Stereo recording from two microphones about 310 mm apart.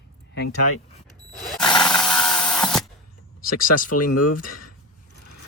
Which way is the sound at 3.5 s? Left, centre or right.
Left.